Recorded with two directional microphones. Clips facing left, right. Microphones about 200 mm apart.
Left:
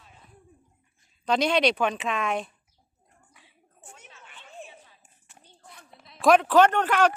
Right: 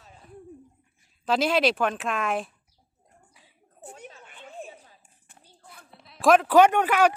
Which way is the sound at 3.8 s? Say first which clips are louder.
Right 8 dB; 35° right (ahead or behind).